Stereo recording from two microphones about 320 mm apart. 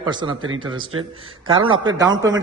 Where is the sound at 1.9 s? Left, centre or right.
Centre.